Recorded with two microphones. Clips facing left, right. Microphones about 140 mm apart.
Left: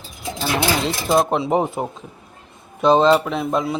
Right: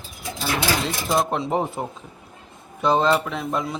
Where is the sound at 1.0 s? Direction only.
25° left (ahead or behind).